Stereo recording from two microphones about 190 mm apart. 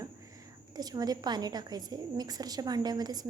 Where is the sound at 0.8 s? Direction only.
20° right (ahead or behind).